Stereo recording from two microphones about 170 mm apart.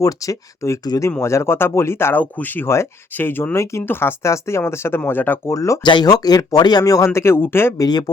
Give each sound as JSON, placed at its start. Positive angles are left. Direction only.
{"t": 0.0, "sound": "speech", "side_deg": 20}